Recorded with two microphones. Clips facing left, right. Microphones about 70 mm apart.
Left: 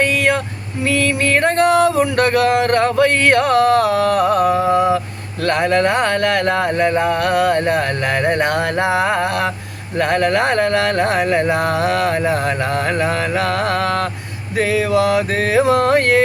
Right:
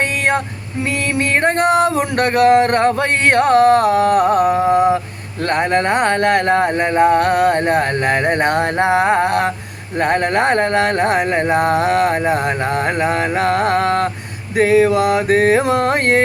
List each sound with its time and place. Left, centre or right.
1.3 s music: right
2.1 s speech: right